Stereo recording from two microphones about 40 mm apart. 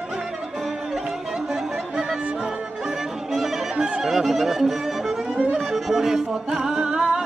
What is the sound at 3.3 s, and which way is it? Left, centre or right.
Music, centre.